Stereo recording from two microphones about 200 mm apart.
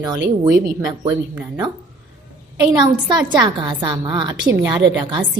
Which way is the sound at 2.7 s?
20° right (ahead or behind).